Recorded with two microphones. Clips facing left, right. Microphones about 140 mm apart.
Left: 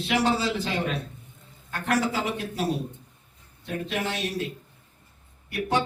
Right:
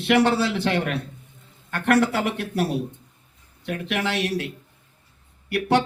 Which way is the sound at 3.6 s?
70° right (ahead or behind).